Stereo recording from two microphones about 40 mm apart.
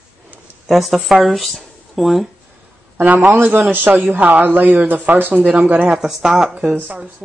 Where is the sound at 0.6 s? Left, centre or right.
Centre.